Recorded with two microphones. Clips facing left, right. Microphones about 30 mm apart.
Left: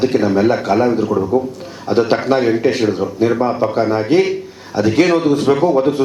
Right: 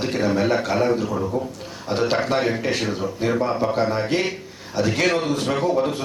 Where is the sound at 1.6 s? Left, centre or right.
Centre.